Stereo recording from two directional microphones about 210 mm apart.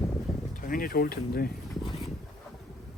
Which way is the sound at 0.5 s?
40° left (ahead or behind).